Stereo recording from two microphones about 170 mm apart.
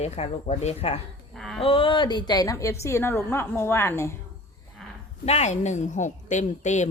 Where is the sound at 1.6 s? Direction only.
30° left (ahead or behind).